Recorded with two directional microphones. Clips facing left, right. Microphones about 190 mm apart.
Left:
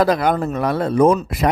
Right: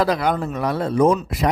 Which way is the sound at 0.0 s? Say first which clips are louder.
Left 3 dB; 50° left (ahead or behind).